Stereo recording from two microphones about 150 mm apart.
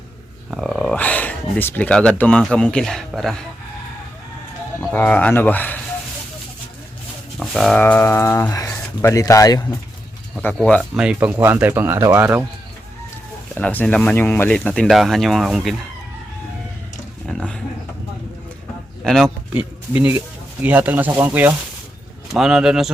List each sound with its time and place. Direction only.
0.5 s a sound: centre (ahead or behind)
2.4 s speech: 5° left (ahead or behind)
4.8 s speech: 10° left (ahead or behind)
7.3 s livestock: centre (ahead or behind)
7.8 s speech: 15° left (ahead or behind)
10.4 s speech: 10° left (ahead or behind)
10.9 s speech: 5° right (ahead or behind)
13.5 s speech: 10° left (ahead or behind)
17.2 s a sound: 5° left (ahead or behind)
19.0 s speech: centre (ahead or behind)
19.5 s speech: 10° right (ahead or behind)